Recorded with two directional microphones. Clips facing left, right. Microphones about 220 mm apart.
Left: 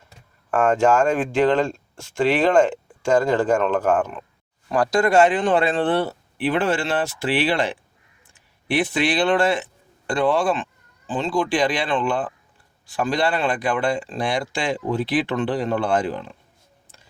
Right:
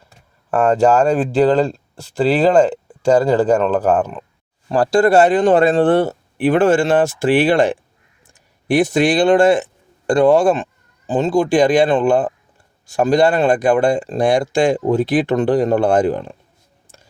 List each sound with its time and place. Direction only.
0.5 s speech: 35° right (ahead or behind)